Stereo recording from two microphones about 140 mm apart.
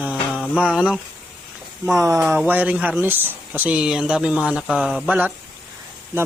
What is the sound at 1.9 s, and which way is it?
A man's voice, 20° right (ahead or behind).